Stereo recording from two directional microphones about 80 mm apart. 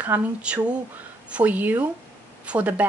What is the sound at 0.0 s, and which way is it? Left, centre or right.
Speech, centre.